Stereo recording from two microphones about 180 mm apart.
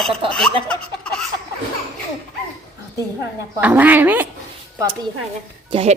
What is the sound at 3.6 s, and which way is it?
Speech, 10° right (ahead or behind).